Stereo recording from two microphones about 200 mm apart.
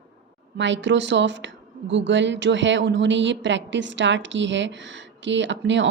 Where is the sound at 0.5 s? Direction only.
65° right (ahead or behind).